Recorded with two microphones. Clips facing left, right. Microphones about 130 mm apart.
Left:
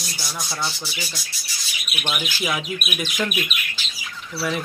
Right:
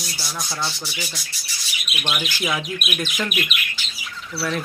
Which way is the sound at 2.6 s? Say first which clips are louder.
Right 1 dB; 15° left (ahead or behind).